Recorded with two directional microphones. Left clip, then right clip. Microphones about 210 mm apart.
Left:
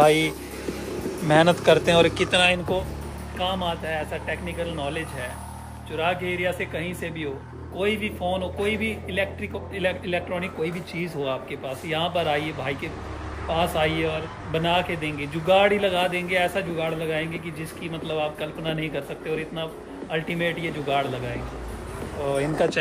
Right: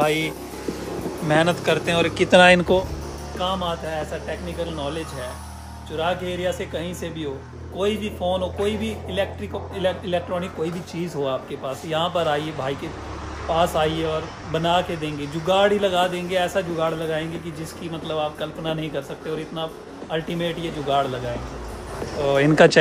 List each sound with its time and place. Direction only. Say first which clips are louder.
0.0 s speech: left 3 dB; 10° right (ahead or behind)
2.3 s speech: right 9 dB; 45° right (ahead or behind)
3.3 s speech: right 1 dB; 15° right (ahead or behind)
4.7 s speech: right 1 dB; 15° right (ahead or behind)
22.3 s speech: right 9 dB; 55° right (ahead or behind)